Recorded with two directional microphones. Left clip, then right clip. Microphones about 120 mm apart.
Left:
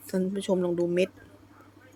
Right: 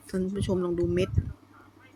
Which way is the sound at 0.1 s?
20° left (ahead or behind).